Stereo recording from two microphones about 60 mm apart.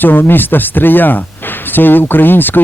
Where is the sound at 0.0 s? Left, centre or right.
Left.